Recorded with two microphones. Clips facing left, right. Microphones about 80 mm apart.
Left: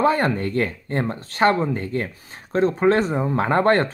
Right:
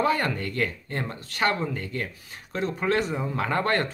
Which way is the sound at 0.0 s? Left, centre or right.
Left.